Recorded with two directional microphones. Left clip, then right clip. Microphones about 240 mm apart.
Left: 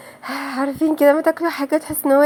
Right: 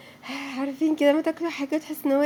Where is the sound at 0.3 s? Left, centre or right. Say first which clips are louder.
Left 8 dB; centre.